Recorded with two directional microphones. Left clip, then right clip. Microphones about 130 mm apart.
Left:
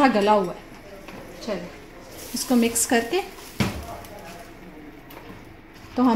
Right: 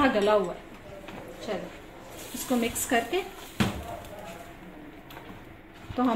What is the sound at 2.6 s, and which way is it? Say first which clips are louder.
Speech: left 4 dB; 50° left (ahead or behind).